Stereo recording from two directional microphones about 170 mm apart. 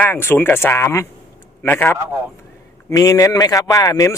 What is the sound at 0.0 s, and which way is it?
Speech, 15° left (ahead or behind).